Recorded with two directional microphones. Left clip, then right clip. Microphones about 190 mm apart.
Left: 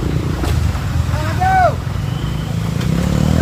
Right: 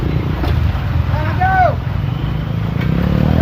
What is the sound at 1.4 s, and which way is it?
Vehicle, 45° right (ahead or behind).